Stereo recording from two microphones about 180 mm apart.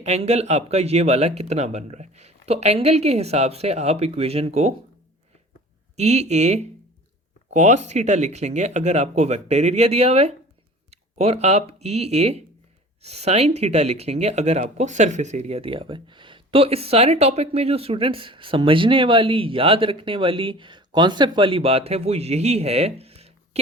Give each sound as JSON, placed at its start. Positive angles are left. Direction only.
{"t": 0.0, "sound": "speech", "side_deg": -35}
{"t": 6.0, "sound": "speech", "side_deg": -40}